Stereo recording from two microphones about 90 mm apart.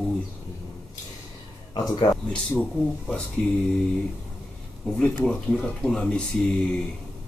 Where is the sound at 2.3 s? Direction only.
15° left (ahead or behind).